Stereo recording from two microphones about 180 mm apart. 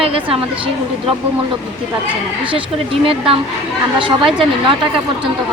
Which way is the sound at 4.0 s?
30° right (ahead or behind).